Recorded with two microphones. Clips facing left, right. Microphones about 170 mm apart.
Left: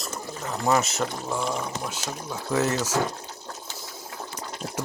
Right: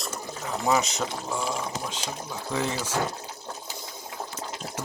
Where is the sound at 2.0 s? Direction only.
5° left (ahead or behind).